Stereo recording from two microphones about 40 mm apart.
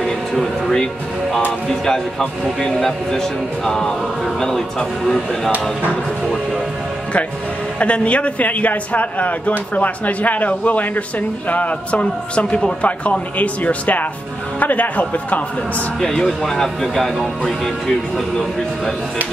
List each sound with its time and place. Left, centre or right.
0.3 s speech: centre
1.9 s speech: centre
7.8 s a man's voice: left
16.0 s speech: centre